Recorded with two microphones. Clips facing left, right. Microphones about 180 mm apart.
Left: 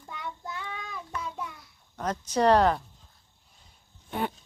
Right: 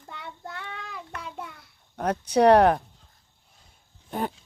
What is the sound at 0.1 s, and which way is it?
Child singing, 65° right (ahead or behind).